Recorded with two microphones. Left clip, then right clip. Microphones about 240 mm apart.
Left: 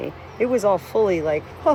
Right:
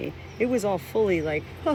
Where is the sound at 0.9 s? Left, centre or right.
Left.